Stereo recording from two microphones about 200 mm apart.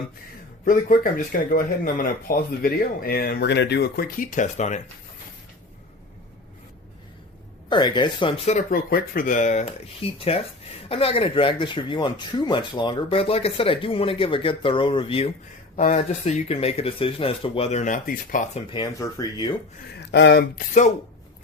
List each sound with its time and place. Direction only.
0.6 s speech: 45° left (ahead or behind)
7.7 s speech: 20° left (ahead or behind)
15.7 s speech: 35° left (ahead or behind)
18.7 s speech: 20° left (ahead or behind)
20.0 s speech: 60° left (ahead or behind)